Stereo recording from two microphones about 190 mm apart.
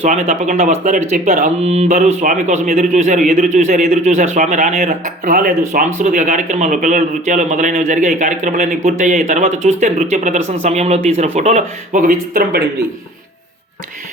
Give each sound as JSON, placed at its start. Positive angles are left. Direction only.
{"t": 0.0, "sound": "speech", "side_deg": -40}